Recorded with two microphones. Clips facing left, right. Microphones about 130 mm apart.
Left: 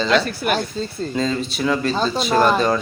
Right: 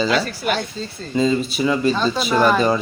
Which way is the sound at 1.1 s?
5° right (ahead or behind).